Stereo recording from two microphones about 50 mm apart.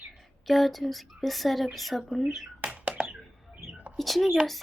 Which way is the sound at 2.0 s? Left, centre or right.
Centre.